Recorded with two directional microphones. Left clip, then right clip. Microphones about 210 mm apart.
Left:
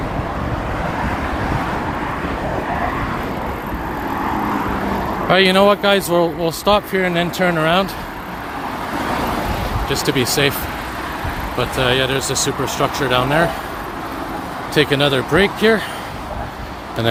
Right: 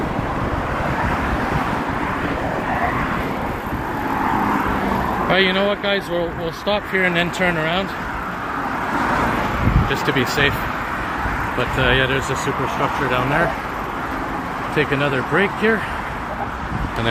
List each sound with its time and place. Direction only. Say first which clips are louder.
5.3 s speech: left 6 dB; 35° left (ahead or behind)
9.9 s speech: left 3 dB; 30° left (ahead or behind)
11.8 s speech: left 1 dB; 30° left (ahead or behind)
14.8 s speech: left 5 dB; 40° left (ahead or behind)